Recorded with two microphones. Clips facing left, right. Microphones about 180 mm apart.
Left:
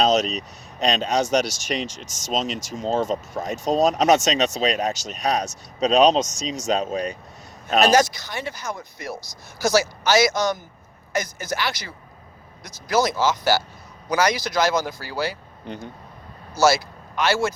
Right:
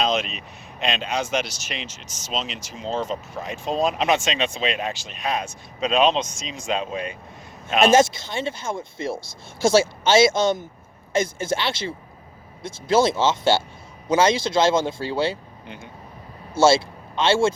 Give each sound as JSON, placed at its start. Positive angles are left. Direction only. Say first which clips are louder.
{"t": 0.0, "sound": "speech", "louder": "left 4 dB", "side_deg": 40}
{"t": 7.9, "sound": "speech", "louder": "right 4 dB", "side_deg": -25}
{"t": 16.6, "sound": "speech", "louder": "right 2 dB", "side_deg": -25}